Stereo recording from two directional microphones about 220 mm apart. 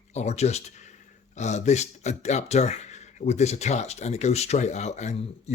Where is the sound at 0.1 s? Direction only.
30° left (ahead or behind).